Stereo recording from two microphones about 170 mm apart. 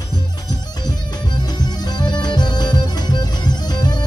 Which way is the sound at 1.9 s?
25° left (ahead or behind).